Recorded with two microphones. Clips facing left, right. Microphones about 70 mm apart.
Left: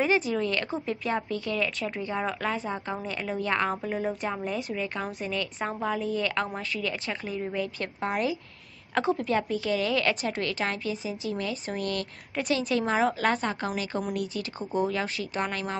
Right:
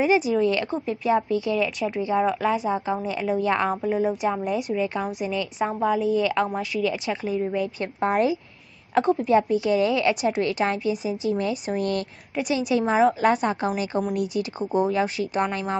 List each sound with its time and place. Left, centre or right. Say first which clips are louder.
0.0 s speech: right 5 dB; centre
0.7 s speech: right 6 dB; centre
3.7 s speech: right 6 dB; centre; by 8.4 s right
9.1 s speech: right 9 dB; centre
11.2 s speech: right 7 dB; right
11.5 s speech: right 6 dB; centre
11.8 s speech: right 4 dB; right
12.4 s speech: right 4 dB; centre